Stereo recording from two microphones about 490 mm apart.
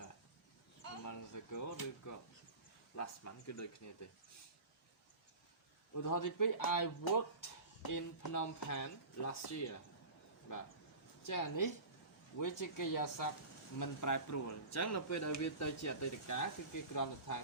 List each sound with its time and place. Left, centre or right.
0.9 s a sound: left
2.9 s speech: left
5.9 s speech: left
11.3 s speech: left